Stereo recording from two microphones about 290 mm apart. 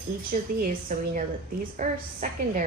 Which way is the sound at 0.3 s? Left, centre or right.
Right.